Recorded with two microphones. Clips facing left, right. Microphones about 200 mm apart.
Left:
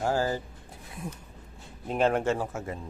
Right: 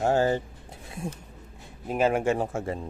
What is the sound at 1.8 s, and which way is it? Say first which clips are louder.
Speech: right 1 dB; 5° right (ahead or behind).